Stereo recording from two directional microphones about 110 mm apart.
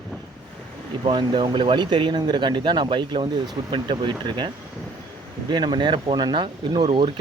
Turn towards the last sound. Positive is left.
turn(degrees=-50)  # may be behind; listen again after turning